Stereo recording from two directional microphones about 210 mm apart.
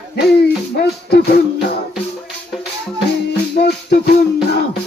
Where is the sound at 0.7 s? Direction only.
50° left (ahead or behind).